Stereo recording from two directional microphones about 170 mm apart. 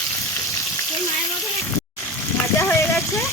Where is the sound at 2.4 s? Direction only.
10° left (ahead or behind).